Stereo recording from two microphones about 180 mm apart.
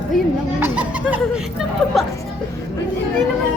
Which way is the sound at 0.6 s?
10° right (ahead or behind).